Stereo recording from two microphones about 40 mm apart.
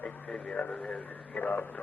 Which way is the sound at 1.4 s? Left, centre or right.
Left.